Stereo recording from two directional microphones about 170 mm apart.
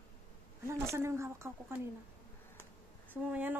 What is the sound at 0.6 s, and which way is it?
Speech, 15° right (ahead or behind).